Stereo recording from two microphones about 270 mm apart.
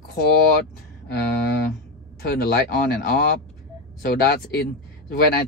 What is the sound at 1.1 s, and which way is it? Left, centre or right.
Speech, left.